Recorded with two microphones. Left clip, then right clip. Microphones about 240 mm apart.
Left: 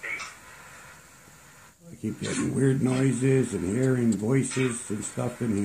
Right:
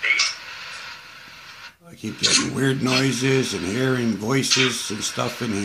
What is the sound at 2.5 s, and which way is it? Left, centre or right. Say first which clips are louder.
Speech: right 5 dB; centre.